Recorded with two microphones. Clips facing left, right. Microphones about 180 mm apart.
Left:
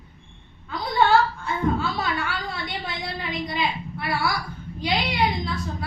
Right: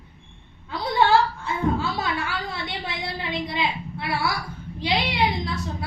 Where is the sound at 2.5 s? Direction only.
25° right (ahead or behind).